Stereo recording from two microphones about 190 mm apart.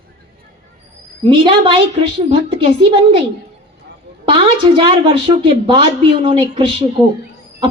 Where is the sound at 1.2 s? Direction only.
25° right (ahead or behind).